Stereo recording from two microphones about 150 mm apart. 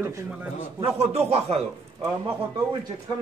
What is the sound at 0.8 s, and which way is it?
Speech, 45° right (ahead or behind).